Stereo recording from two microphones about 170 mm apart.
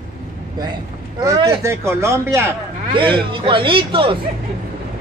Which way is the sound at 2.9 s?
30° right (ahead or behind).